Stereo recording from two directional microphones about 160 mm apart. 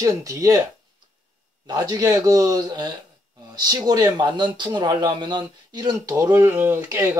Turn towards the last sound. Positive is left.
turn(degrees=-15)  # may be behind; listen again after turning